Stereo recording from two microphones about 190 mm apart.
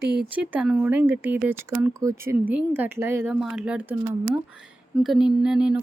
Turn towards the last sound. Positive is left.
turn(degrees=-5)  # may be behind; listen again after turning